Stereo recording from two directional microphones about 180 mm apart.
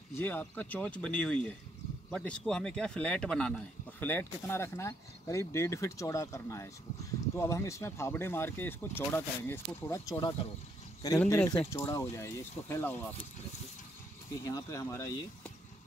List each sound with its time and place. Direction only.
0.2 s speech: 10° left (ahead or behind)
14.4 s speech: 20° left (ahead or behind)